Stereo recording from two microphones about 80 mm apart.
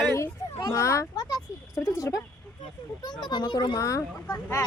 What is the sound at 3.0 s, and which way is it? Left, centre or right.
Speech, left.